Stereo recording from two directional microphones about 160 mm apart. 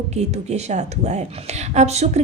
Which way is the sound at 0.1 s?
45° right (ahead or behind).